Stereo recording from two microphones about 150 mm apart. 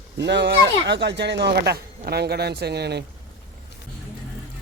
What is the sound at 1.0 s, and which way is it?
Speech, 90° right.